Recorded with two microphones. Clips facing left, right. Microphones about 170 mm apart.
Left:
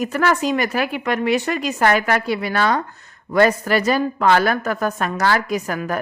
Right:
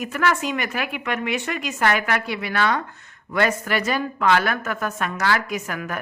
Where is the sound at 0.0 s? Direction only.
40° left (ahead or behind).